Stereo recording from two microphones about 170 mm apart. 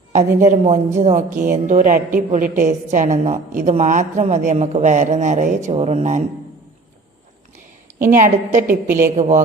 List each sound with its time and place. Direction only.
0.1 s a woman's voice: 45° right (ahead or behind)
8.2 s a woman's voice: 45° right (ahead or behind)
8.6 s a woman's voice: 10° right (ahead or behind)